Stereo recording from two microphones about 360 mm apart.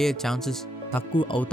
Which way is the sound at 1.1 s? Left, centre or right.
Centre.